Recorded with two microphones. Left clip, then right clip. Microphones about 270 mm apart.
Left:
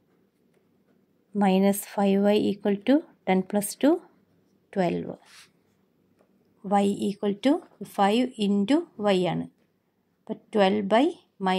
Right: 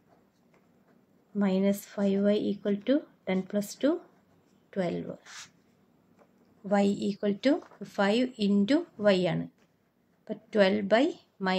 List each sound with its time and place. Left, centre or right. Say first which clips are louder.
1.4 s speech: left 6 dB; left
6.7 s a woman's voice: left 3 dB; left